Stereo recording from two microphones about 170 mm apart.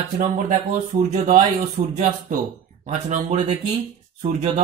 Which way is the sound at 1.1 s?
45° right (ahead or behind).